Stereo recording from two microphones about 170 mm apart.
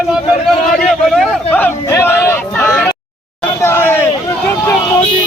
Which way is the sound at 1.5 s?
15° left (ahead or behind).